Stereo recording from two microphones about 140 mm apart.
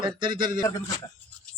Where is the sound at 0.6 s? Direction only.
20° left (ahead or behind).